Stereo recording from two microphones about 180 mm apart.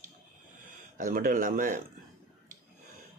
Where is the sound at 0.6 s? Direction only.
50° right (ahead or behind).